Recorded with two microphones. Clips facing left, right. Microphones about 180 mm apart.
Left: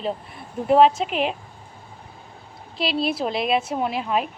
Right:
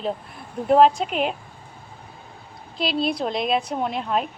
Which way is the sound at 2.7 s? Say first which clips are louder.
Even; centre (ahead or behind).